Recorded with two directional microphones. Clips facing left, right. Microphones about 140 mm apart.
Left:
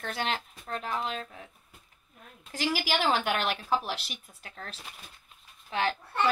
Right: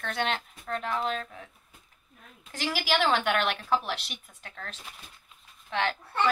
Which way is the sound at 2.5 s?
40° left (ahead or behind).